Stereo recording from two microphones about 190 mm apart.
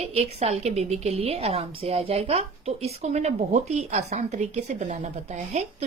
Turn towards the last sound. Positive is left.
turn(degrees=-35)  # may be behind; listen again after turning